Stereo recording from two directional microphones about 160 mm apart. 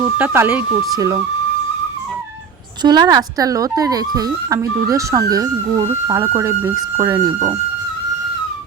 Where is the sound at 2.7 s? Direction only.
25° right (ahead or behind).